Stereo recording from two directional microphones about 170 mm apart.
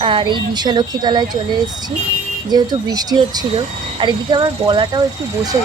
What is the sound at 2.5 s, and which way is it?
Speech, 25° right (ahead or behind).